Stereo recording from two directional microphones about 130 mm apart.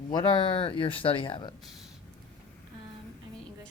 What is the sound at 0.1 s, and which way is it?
Speech, 35° left (ahead or behind).